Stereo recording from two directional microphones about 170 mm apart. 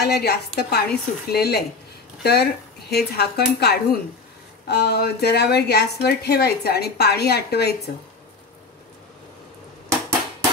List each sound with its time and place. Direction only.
0.0 s speech: 70° left (ahead or behind)